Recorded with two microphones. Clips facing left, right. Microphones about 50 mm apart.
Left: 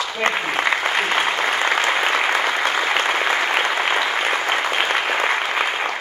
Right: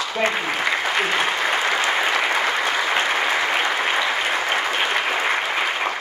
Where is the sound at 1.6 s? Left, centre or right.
Left.